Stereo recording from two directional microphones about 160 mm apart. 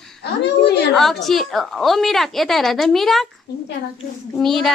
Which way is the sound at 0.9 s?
Centre (ahead or behind).